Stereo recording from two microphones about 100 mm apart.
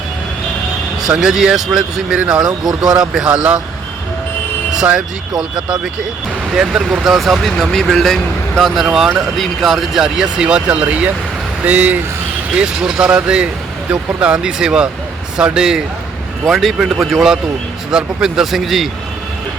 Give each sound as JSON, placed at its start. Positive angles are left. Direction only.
{"t": 1.0, "sound": "speech", "side_deg": -5}
{"t": 4.7, "sound": "speech", "side_deg": -5}